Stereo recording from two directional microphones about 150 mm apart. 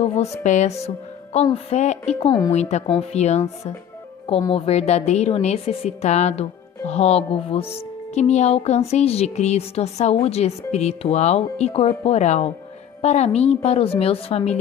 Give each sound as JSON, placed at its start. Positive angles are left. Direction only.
{"t": 0.0, "sound": "speech", "side_deg": 45}
{"t": 2.1, "sound": "speech", "side_deg": 30}
{"t": 2.5, "sound": "speech", "side_deg": 45}